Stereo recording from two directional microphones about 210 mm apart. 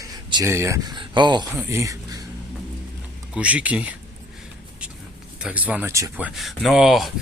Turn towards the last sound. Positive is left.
turn(degrees=0)  # may be behind; listen again after turning